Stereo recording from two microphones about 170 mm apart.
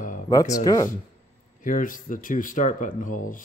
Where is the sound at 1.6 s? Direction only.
50° left (ahead or behind).